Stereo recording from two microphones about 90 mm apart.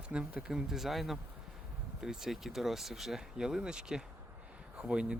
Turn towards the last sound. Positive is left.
turn(degrees=-10)  # may be behind; listen again after turning